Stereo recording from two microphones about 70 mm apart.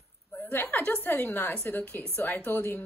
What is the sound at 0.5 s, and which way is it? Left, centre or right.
A woman's voice, left.